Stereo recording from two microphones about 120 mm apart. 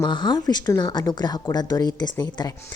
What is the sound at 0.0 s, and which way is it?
A woman's voice, 40° left (ahead or behind).